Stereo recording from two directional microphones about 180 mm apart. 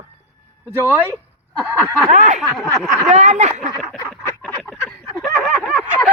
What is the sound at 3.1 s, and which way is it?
Speech, 40° right (ahead or behind).